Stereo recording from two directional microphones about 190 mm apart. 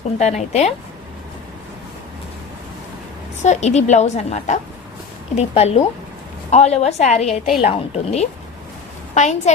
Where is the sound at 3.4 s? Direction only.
35° left (ahead or behind).